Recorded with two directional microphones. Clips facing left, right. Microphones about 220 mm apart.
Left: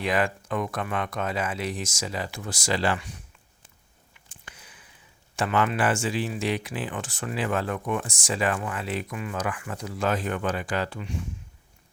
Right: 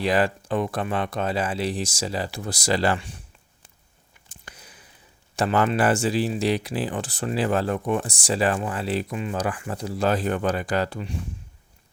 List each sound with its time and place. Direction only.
0.0 s speech: 35° right (ahead or behind)
4.3 s a sound: 40° right (ahead or behind)
5.4 s speech: 35° right (ahead or behind)